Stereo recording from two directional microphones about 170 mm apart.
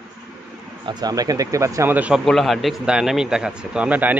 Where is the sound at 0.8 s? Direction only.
20° right (ahead or behind).